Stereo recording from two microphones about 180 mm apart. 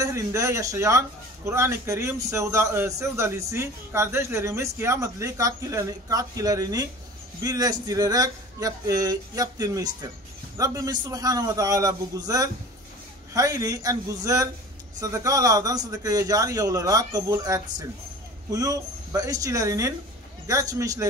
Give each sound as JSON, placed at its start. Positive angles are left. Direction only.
{"t": 0.0, "sound": "a man's voice", "side_deg": -15}